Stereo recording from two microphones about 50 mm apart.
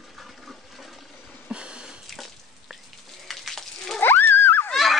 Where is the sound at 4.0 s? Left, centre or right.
Left.